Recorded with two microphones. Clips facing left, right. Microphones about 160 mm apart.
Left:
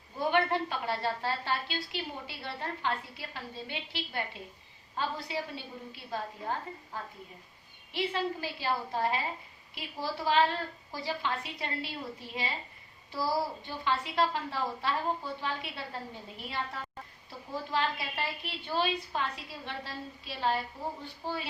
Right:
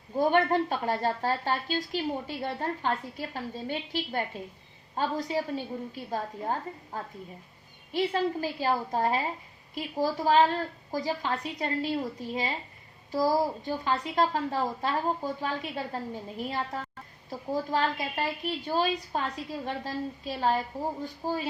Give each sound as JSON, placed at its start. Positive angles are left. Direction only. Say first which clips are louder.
{"t": 0.2, "sound": "a woman's voice", "louder": "right 5 dB", "side_deg": -45}